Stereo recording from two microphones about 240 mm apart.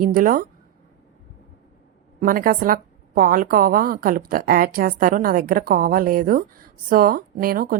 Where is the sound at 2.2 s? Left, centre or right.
Right.